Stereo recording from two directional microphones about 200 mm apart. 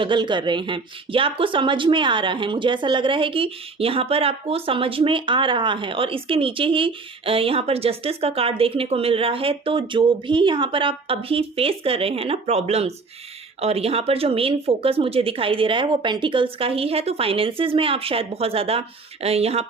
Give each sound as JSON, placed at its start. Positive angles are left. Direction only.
{"t": 0.0, "sound": "a woman's voice", "side_deg": -25}